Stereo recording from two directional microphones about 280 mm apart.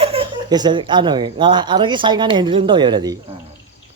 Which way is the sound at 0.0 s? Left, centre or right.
Centre.